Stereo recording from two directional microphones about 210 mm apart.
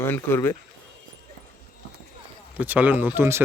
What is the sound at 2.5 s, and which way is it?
Speech, 10° right (ahead or behind).